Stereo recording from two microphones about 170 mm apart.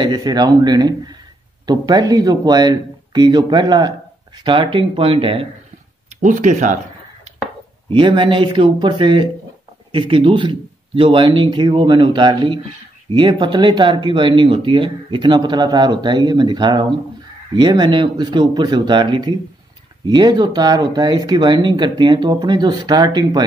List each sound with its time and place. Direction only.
0.0 s speech: 25° right (ahead or behind)
6.2 s speech: 45° right (ahead or behind)
7.9 s speech: 30° right (ahead or behind)